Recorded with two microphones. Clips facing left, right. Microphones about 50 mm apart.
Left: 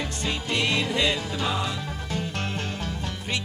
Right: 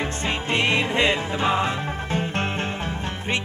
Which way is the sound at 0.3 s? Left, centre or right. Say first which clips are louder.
Right 4 dB; right.